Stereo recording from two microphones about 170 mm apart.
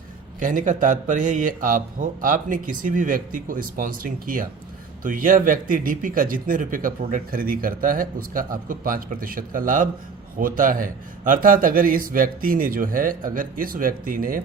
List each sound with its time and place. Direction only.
0.3 s a man's voice: 50° right (ahead or behind)